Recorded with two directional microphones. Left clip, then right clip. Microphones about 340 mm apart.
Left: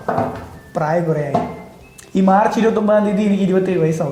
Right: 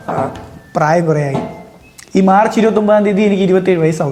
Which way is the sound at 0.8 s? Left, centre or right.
Right.